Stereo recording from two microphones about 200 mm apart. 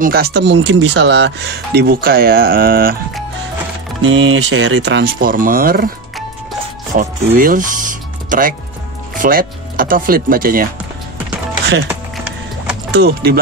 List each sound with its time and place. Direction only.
0.0 s speech: 50° right (ahead or behind)
1.8 s speech: 50° right (ahead or behind)
4.0 s speech: 75° right (ahead or behind); by 5.9 s 45° right (ahead or behind)
6.9 s speech: 45° right (ahead or behind)
12.9 s speech: 50° right (ahead or behind)